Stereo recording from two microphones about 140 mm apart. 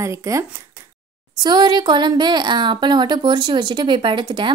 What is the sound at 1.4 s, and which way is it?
Speech, 35° right (ahead or behind).